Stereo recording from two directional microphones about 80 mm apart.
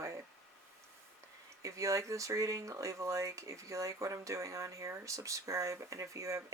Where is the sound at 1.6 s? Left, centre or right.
Right.